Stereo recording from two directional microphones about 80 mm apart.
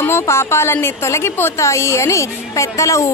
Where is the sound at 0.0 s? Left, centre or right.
Left.